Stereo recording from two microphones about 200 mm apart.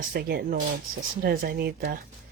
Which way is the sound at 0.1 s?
50° right (ahead or behind).